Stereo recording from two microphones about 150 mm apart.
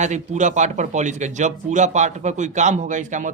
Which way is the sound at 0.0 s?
50° right (ahead or behind).